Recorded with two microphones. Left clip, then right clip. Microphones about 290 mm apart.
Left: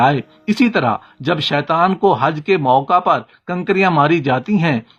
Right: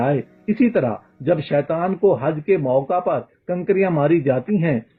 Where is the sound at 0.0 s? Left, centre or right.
Left.